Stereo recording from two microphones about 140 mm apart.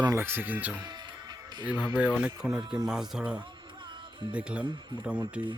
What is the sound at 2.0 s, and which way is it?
Speech, 5° right (ahead or behind).